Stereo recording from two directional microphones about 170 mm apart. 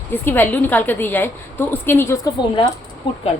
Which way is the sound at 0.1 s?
10° left (ahead or behind).